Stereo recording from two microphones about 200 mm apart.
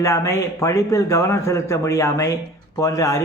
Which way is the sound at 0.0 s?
15° left (ahead or behind).